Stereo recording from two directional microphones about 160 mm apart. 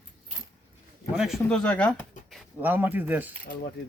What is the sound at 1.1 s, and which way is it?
Speech, centre (ahead or behind).